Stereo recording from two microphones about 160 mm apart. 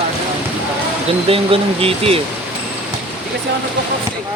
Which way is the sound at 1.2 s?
35° right (ahead or behind).